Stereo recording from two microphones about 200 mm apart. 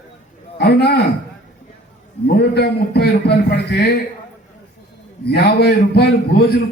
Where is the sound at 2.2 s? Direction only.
50° left (ahead or behind).